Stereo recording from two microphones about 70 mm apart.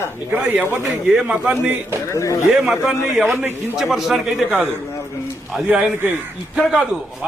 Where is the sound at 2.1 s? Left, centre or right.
Left.